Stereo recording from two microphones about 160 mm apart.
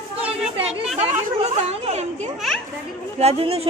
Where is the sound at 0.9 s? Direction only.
40° right (ahead or behind).